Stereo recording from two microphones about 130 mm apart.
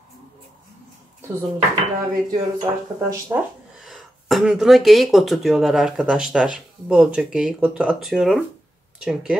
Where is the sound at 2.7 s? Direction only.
45° right (ahead or behind).